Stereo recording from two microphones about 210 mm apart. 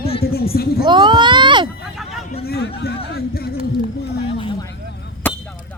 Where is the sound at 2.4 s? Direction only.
45° left (ahead or behind).